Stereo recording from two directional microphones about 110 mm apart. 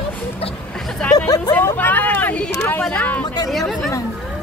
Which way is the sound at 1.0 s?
10° left (ahead or behind).